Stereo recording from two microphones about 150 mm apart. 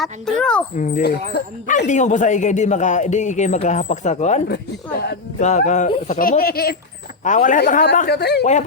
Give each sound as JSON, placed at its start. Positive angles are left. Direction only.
{"t": 0.0, "sound": "a child's voice", "side_deg": 5}
{"t": 0.8, "sound": "speech", "side_deg": 60}
{"t": 4.4, "sound": "a woman's voice", "side_deg": 90}
{"t": 5.4, "sound": "speech", "side_deg": 50}
{"t": 7.3, "sound": "a man's voice", "side_deg": 60}